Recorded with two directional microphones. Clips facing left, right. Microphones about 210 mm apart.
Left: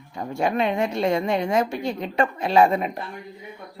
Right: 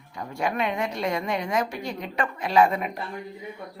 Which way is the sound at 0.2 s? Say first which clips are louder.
Left 4 dB; 25° left (ahead or behind).